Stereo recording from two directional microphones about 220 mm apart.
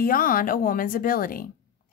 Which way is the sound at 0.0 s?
40° left (ahead or behind).